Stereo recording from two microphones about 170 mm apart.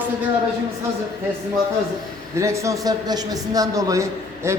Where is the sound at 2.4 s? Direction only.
15° right (ahead or behind).